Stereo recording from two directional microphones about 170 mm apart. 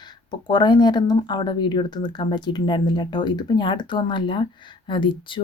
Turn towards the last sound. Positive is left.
turn(degrees=30)  # may be behind; listen again after turning